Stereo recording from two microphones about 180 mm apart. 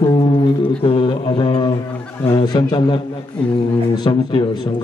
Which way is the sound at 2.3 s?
25° left (ahead or behind).